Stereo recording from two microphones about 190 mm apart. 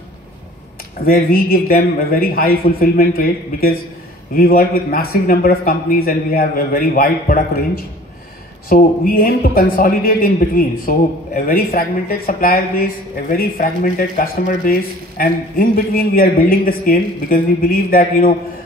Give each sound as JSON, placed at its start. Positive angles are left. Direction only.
{"t": 1.0, "sound": "a man's voice", "side_deg": 50}